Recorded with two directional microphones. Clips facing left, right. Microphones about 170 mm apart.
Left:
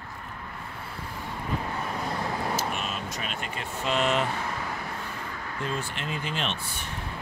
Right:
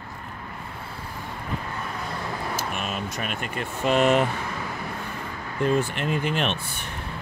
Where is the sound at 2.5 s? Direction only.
55° right (ahead or behind).